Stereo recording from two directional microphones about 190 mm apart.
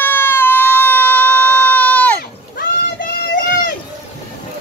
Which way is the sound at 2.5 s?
45° left (ahead or behind).